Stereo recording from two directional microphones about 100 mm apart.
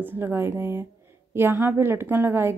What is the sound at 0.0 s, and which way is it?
Speech, 20° right (ahead or behind).